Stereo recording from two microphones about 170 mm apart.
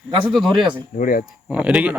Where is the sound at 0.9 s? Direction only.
55° left (ahead or behind).